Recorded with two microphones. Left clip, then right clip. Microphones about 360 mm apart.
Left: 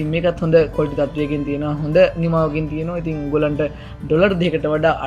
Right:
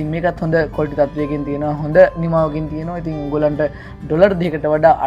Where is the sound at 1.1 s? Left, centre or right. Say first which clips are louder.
Right 1 dB; right.